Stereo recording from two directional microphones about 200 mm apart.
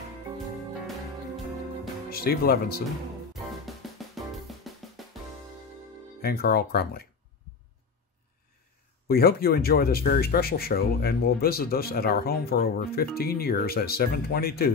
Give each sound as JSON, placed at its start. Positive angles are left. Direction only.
{"t": 2.0, "sound": "speech", "side_deg": 50}
{"t": 3.6, "sound": "music", "side_deg": 0}
{"t": 6.2, "sound": "speech", "side_deg": 50}
{"t": 9.0, "sound": "speech", "side_deg": 50}